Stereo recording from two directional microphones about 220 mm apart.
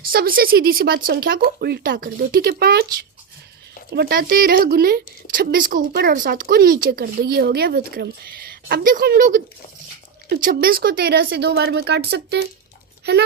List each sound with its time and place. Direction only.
0.1 s speech: 40° right (ahead or behind)
3.9 s speech: 45° right (ahead or behind)